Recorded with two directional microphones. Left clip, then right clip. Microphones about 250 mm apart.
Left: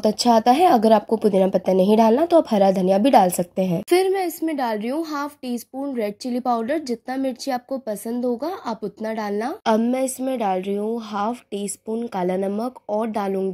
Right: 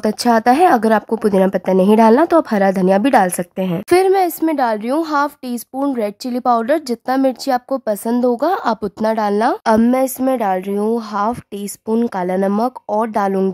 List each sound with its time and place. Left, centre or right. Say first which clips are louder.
0.2 s a woman's voice: right 4 dB; centre